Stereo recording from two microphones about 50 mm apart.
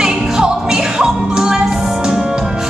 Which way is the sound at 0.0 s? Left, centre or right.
Centre.